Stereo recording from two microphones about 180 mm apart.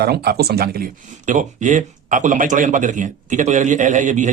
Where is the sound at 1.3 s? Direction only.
45° right (ahead or behind).